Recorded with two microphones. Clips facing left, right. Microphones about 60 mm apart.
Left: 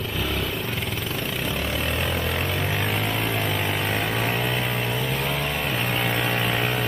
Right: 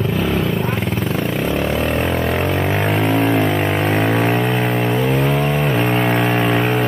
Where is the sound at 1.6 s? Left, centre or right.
Right.